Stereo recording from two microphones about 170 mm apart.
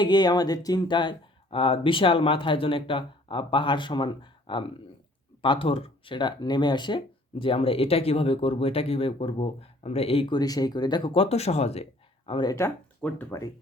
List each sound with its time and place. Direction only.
0.0 s speech: 25° left (ahead or behind)
12.5 s speech: 15° left (ahead or behind)